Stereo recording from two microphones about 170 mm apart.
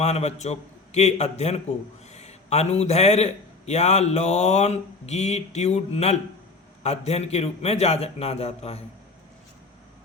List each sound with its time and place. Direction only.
0.0 s a man's voice: 40° left (ahead or behind)